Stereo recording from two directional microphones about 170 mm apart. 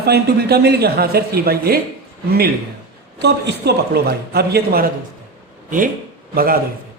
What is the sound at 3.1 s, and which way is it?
A man's voice, 75° right (ahead or behind).